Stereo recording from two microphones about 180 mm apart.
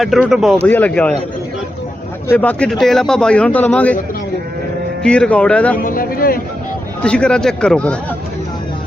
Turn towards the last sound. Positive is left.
turn(degrees=5)  # may be behind; listen again after turning